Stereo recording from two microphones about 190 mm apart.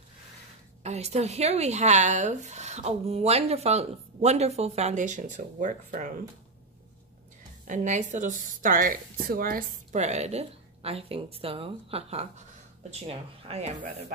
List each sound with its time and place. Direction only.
0.8 s speech: 35° right (ahead or behind)
7.6 s speech: 40° right (ahead or behind)